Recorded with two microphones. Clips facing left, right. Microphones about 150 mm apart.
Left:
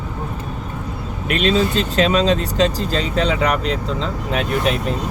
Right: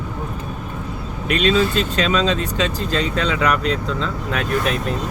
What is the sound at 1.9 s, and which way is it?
Speech, 45° left (ahead or behind).